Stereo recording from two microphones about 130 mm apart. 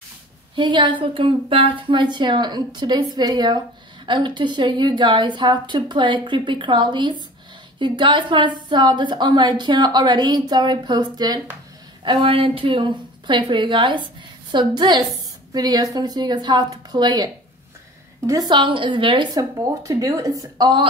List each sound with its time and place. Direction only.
0.6 s a woman's voice: 35° right (ahead or behind)
19.8 s speech: 25° right (ahead or behind)